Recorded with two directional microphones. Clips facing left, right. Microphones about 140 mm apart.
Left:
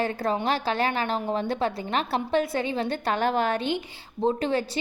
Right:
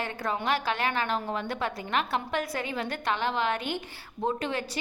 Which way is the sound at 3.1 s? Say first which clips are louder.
Left 3 dB; 45° left (ahead or behind).